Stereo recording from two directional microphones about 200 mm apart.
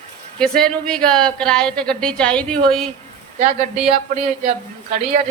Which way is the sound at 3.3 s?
35° right (ahead or behind).